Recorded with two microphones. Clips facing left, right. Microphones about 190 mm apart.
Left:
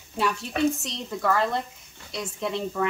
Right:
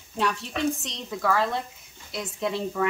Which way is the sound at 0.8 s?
Centre (ahead or behind).